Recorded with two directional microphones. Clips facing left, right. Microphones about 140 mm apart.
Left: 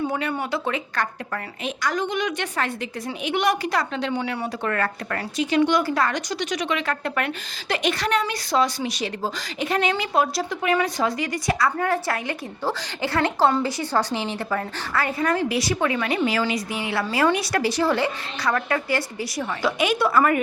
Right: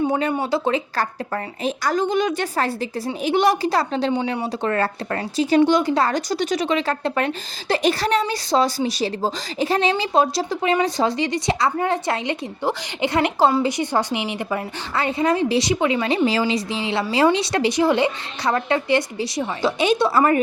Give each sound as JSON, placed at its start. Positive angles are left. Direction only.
{"t": 0.0, "sound": "speech", "side_deg": -25}
{"t": 4.1, "sound": "speech", "side_deg": -15}
{"t": 4.6, "sound": "a woman's voice", "side_deg": -30}